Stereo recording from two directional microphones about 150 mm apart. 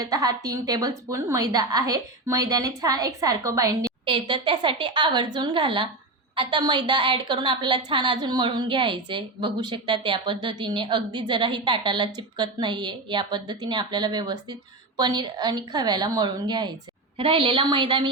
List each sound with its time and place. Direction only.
0.0 s a woman's voice: 25° right (ahead or behind)
4.0 s a woman's voice: 35° right (ahead or behind)